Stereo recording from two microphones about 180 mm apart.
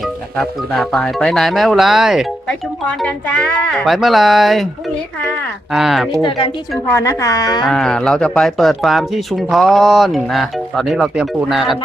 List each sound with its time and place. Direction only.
0.3 s speech: 5° left (ahead or behind)
5.7 s speech: centre (ahead or behind)
6.2 s a woman's voice: 30° left (ahead or behind)
6.9 s a woman's voice: 15° left (ahead or behind)
7.6 s speech: 5° left (ahead or behind)